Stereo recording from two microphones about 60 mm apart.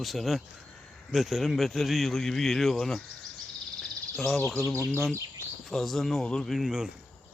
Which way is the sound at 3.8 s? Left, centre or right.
Centre.